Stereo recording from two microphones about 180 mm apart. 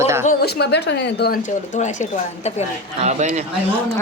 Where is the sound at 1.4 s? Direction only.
45° left (ahead or behind).